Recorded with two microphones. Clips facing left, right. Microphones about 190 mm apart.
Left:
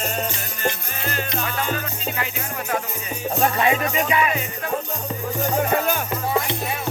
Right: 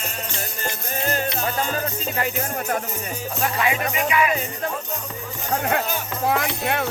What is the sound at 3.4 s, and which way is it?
Music, 30° left (ahead or behind).